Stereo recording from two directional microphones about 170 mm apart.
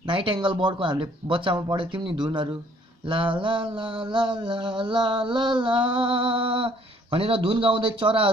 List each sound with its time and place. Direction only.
0.0 s speech: 30° right (ahead or behind)
2.2 s mantra: 25° right (ahead or behind)
6.3 s speech: 30° right (ahead or behind)